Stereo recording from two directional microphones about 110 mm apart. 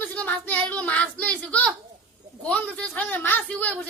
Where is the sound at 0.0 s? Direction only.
15° left (ahead or behind).